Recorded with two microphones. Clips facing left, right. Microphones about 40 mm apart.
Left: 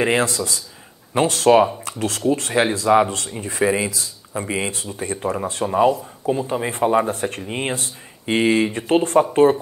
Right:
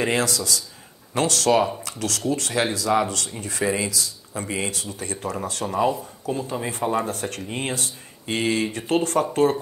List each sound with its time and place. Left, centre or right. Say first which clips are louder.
0.0 s speech: left 4 dB; left